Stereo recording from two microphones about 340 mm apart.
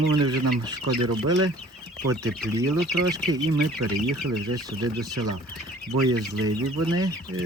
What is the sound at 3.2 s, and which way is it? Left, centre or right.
Speech, right.